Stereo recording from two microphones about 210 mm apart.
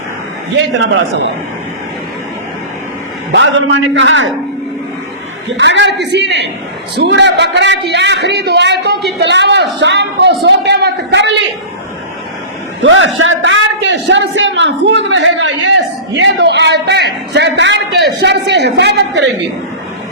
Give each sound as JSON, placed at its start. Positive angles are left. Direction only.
{"t": 3.3, "sound": "speech", "side_deg": -60}
{"t": 5.5, "sound": "speech", "side_deg": -60}
{"t": 12.8, "sound": "a man's voice", "side_deg": -65}